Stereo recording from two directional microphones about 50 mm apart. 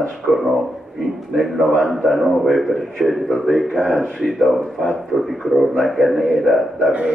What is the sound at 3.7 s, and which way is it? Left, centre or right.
Speech, centre.